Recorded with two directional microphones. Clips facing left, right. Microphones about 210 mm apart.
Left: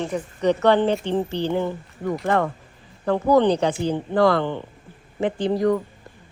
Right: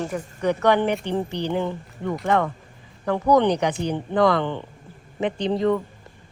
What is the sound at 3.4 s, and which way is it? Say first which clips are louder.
Speech: left 2 dB; 15° right (ahead or behind).